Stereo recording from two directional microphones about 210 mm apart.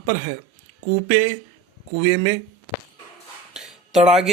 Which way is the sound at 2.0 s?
60° right (ahead or behind).